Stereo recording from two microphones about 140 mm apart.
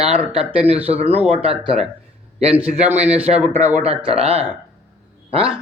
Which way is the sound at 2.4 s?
45° right (ahead or behind).